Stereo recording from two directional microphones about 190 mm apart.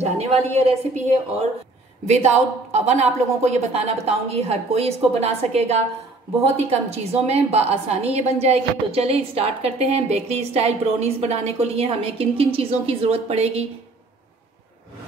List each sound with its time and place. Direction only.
0.0 s a woman's voice: 35° right (ahead or behind)